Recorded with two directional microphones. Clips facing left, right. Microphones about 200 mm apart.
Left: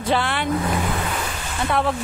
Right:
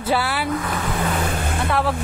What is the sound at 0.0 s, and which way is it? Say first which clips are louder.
Speech: even; 5° right (ahead or behind).